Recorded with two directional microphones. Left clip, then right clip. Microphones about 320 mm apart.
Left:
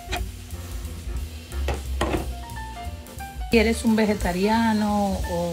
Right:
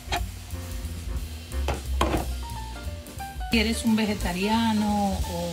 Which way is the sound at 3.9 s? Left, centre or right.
Centre.